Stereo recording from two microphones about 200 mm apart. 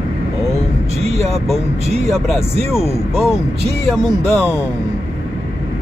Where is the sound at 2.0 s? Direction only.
Centre (ahead or behind).